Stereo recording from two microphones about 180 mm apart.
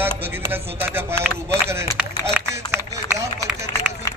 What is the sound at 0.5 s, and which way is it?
Speech, 10° right (ahead or behind).